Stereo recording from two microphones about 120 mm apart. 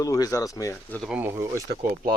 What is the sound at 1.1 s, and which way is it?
Speech, 20° right (ahead or behind).